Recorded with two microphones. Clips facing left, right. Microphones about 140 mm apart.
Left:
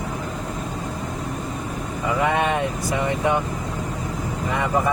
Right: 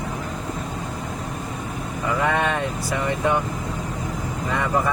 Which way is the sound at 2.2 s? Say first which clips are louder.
Left 2 dB; 15° left (ahead or behind).